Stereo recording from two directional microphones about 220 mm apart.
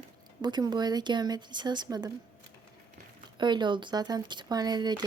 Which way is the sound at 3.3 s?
20° right (ahead or behind).